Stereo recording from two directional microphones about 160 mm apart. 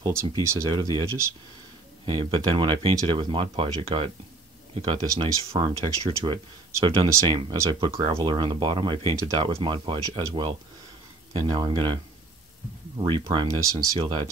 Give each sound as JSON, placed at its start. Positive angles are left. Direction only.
{"t": 0.0, "sound": "speech", "side_deg": -20}
{"t": 2.0, "sound": "speech", "side_deg": -30}
{"t": 13.0, "sound": "speech", "side_deg": -30}